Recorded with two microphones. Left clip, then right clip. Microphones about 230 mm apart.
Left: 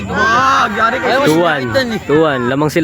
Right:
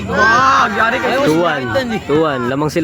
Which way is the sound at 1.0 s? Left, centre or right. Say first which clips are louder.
Left 2 dB; left.